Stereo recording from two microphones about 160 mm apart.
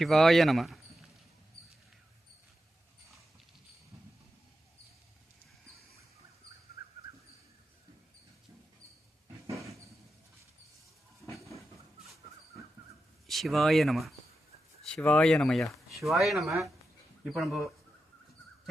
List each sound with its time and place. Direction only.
0.0 s speech: centre (ahead or behind)
11.3 s a sound: 20° left (ahead or behind)
13.2 s speech: centre (ahead or behind)